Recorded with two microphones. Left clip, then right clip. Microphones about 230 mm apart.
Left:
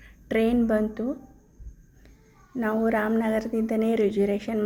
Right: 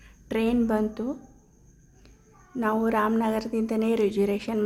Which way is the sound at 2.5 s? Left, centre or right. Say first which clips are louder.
Even; centre.